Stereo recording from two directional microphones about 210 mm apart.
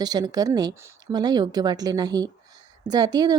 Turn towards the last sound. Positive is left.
turn(degrees=-20)  # may be behind; listen again after turning